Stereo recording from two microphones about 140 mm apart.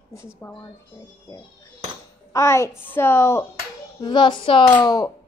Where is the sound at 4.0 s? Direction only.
35° left (ahead or behind).